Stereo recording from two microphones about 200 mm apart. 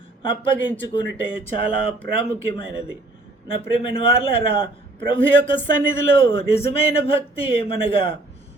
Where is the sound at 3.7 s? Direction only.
25° left (ahead or behind).